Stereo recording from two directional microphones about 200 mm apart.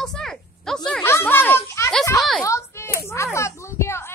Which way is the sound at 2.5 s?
15° left (ahead or behind).